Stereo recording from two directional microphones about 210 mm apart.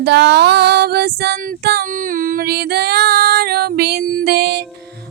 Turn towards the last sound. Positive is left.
turn(degrees=-50)  # may be behind; listen again after turning